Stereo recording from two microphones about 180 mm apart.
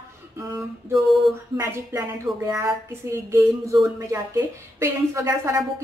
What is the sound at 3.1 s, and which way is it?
Speech, 15° right (ahead or behind).